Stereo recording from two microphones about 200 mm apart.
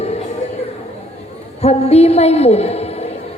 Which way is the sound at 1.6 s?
30° left (ahead or behind).